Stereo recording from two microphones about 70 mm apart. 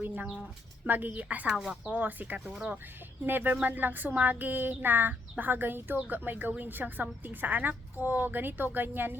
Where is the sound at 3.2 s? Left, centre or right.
Right.